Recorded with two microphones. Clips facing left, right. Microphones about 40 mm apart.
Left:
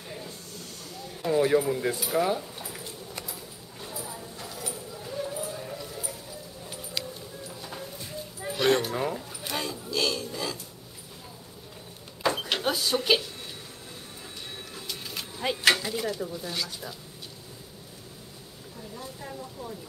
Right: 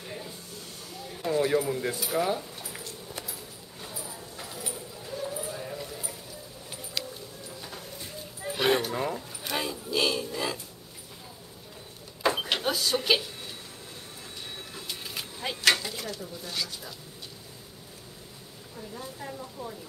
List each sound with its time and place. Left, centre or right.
1.2 s speech: centre
3.8 s clip-clop: centre
6.9 s a sound: centre
8.5 s speech: centre
8.8 s speech: centre
12.2 s vehicle: centre
14.9 s vehicle: centre
15.4 s speech: centre
18.8 s speech: centre